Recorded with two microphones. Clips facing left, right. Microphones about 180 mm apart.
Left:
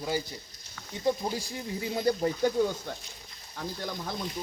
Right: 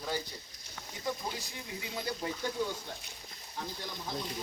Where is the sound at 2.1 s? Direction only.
45° left (ahead or behind).